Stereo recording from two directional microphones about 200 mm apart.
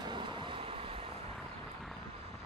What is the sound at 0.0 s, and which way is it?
Vehicle, 25° right (ahead or behind).